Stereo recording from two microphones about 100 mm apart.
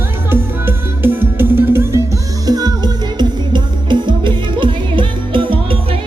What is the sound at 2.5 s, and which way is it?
Music, 40° right (ahead or behind).